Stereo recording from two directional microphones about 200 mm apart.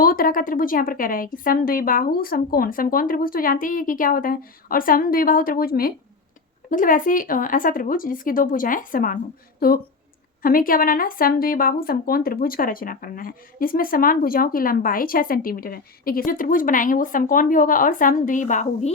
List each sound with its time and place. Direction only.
0.0 s a woman's voice: 45° left (ahead or behind)